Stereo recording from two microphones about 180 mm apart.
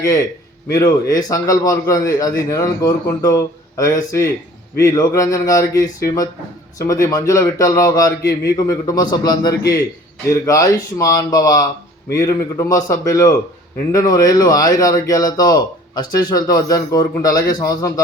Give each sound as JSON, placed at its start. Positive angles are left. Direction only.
{"t": 0.7, "sound": "a man's voice", "side_deg": 20}